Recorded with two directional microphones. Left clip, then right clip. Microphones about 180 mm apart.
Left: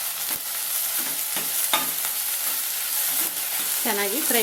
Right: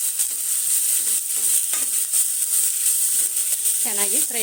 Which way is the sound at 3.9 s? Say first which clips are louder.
Left 2 dB; 30° right (ahead or behind).